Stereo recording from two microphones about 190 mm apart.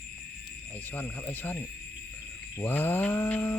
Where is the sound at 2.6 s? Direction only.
10° left (ahead or behind).